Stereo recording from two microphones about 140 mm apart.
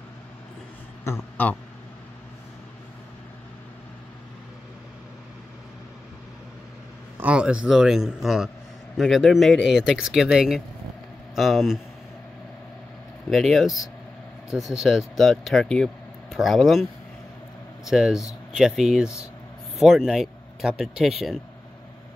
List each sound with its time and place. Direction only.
1.0 s a man's voice: 15° left (ahead or behind)
7.2 s speech: 10° right (ahead or behind)
13.3 s speech: centre (ahead or behind)
17.8 s speech: 5° right (ahead or behind)